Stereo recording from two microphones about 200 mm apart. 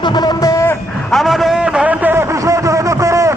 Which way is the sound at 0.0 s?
20° left (ahead or behind).